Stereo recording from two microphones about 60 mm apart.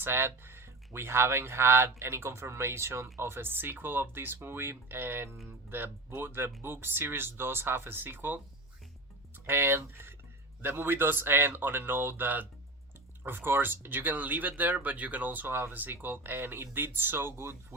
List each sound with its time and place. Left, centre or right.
0.0 s speech: right
9.5 s speech: right